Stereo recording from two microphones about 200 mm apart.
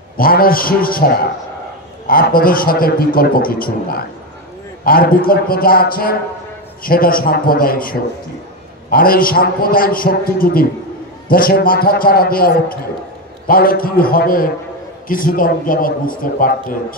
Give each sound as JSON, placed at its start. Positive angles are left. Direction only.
{"t": 0.2, "sound": "a man's voice", "side_deg": 45}